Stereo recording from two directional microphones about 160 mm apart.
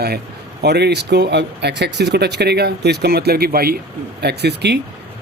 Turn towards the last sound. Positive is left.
turn(degrees=-90)